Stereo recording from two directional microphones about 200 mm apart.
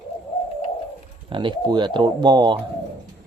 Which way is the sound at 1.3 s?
25° right (ahead or behind).